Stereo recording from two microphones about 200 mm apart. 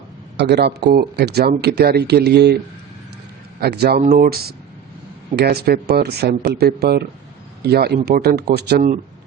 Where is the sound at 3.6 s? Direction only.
50° right (ahead or behind).